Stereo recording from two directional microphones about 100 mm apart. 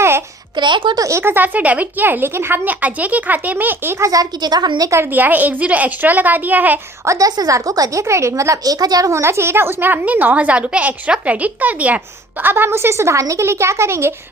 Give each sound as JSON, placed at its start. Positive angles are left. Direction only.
{"t": 0.5, "sound": "a woman's voice", "side_deg": -50}
{"t": 0.9, "sound": "a woman's voice", "side_deg": -30}
{"t": 4.9, "sound": "a woman's voice", "side_deg": -20}
{"t": 7.0, "sound": "a woman's voice", "side_deg": -35}